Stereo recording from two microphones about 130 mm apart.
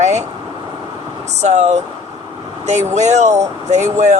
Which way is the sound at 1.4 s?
60° right (ahead or behind).